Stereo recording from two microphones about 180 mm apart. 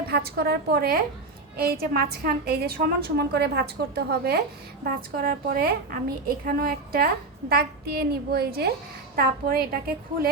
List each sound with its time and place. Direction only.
0.1 s a woman's voice: 60° right (ahead or behind)